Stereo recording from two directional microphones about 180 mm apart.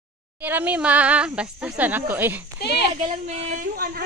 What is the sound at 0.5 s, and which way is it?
Speech, 10° right (ahead or behind).